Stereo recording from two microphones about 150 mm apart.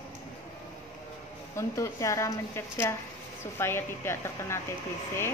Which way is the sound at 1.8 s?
20° left (ahead or behind).